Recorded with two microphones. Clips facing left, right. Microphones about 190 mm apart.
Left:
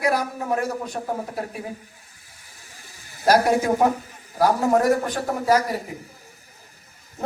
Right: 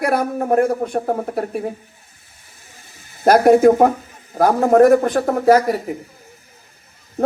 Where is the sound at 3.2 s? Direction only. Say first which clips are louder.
Right 8 dB; 55° right (ahead or behind).